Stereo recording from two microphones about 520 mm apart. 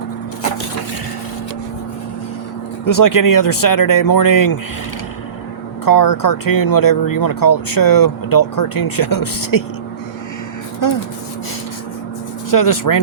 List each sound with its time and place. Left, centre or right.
2.8 s speech: left
5.8 s speech: left
10.8 s speech: left
12.5 s speech: left